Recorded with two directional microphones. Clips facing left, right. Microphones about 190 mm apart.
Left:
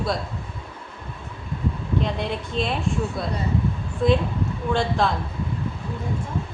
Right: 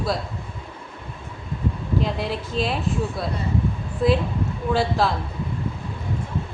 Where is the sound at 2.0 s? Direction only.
Centre (ahead or behind).